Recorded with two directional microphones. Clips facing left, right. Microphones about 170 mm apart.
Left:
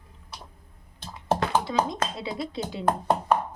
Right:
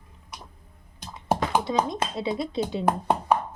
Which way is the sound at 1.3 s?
15° right (ahead or behind).